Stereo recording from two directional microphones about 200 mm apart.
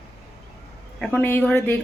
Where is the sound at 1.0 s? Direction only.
10° left (ahead or behind).